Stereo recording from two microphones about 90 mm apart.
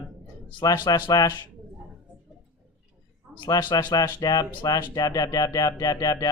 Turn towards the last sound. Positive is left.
turn(degrees=45)  # may be behind; listen again after turning